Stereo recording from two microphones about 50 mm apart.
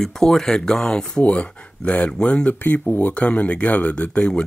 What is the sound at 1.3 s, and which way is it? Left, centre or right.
Speech, left.